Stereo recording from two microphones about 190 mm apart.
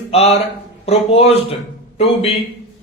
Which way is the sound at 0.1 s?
30° left (ahead or behind).